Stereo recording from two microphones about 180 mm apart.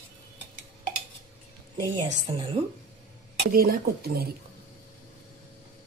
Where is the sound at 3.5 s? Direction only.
55° right (ahead or behind).